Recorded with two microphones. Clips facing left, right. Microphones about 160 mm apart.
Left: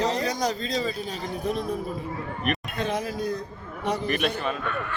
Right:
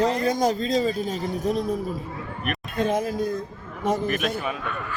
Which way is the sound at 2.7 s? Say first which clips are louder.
Right 4 dB; 50° right (ahead or behind).